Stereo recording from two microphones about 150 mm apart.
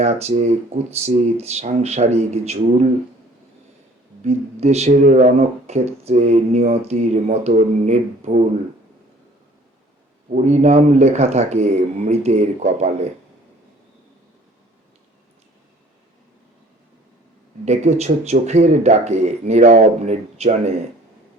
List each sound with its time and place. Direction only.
0.0 s speech: 45° right (ahead or behind)
4.2 s speech: 45° right (ahead or behind)
10.2 s speech: 55° right (ahead or behind)
17.7 s speech: 45° right (ahead or behind)